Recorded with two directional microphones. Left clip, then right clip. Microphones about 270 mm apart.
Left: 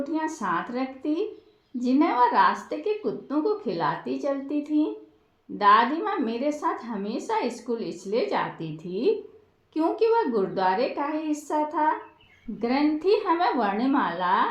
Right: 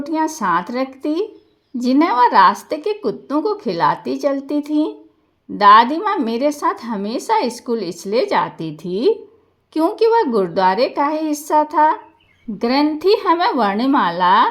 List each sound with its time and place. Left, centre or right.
0.0 s a woman's voice: right